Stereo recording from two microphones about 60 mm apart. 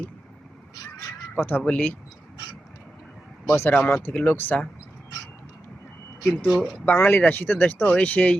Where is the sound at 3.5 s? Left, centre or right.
Left.